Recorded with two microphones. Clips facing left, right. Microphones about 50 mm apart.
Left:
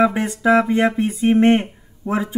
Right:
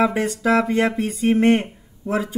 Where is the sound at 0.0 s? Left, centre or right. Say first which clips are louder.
Left 2 dB; centre.